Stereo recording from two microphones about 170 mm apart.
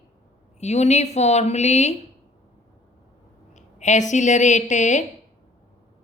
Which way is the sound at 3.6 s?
45° left (ahead or behind).